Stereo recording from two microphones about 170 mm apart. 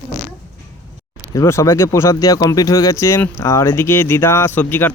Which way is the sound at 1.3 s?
20° left (ahead or behind).